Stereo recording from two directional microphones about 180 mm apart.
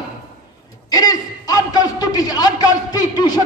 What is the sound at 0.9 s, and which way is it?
A man's voice, 20° left (ahead or behind).